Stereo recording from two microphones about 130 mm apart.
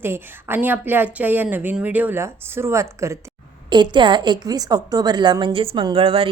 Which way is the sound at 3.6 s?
35° right (ahead or behind).